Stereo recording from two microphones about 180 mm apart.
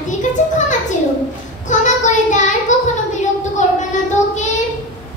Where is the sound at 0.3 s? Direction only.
45° left (ahead or behind).